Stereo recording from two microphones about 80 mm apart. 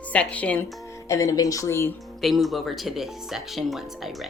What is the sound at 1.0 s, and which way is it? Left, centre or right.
Speech, left.